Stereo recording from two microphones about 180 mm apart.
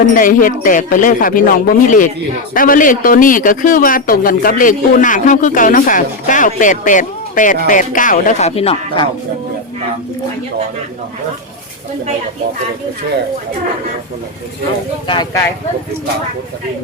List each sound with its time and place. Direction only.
0.0 s a man's voice: 50° left (ahead or behind)
15.0 s speech: 25° left (ahead or behind)